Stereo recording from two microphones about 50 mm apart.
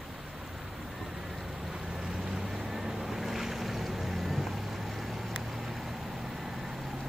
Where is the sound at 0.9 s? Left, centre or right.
Centre.